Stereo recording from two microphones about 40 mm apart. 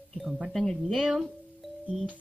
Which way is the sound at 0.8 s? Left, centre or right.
Centre.